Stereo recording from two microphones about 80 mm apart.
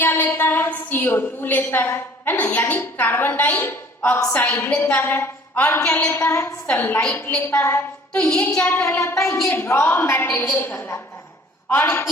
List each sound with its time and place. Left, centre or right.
0.0 s a woman's voice: left
5.8 s a woman's voice: centre
6.1 s a woman's voice: left
7.1 s a woman's voice: left
8.1 s a woman's voice: centre
8.6 s a woman's voice: left